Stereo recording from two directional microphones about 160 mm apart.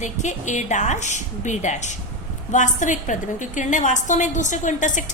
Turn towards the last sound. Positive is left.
turn(degrees=50)  # may be behind; listen again after turning